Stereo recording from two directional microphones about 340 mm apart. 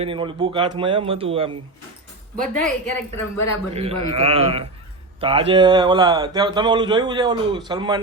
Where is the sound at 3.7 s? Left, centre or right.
Centre.